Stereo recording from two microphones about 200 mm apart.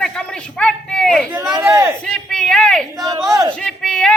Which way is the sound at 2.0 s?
5° left (ahead or behind).